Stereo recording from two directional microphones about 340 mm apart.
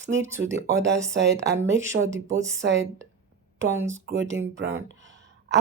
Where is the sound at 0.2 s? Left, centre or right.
Centre.